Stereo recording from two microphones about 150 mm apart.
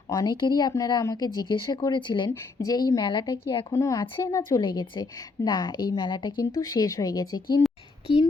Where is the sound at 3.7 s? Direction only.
20° left (ahead or behind).